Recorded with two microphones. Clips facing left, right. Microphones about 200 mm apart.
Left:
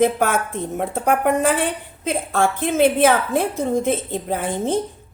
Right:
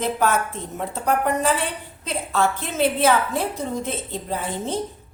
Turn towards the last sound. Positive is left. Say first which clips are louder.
# left 5 dB
turn(degrees=55)  # may be behind; listen again after turning